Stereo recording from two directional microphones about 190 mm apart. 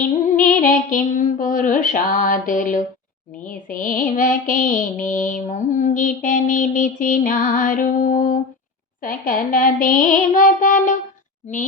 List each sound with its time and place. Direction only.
0.3 s music: 45° left (ahead or behind)